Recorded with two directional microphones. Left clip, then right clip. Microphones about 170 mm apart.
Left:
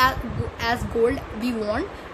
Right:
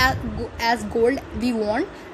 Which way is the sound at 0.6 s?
20° right (ahead or behind).